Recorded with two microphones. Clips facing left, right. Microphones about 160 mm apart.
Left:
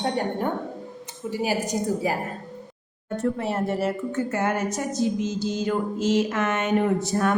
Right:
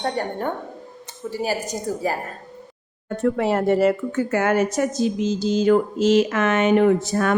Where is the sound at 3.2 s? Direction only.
90° right.